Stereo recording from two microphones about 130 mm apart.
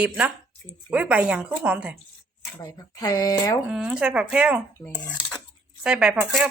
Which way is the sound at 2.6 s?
30° left (ahead or behind).